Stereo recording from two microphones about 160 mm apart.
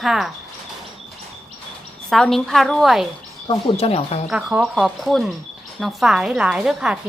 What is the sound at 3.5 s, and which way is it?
Speech, 40° left (ahead or behind).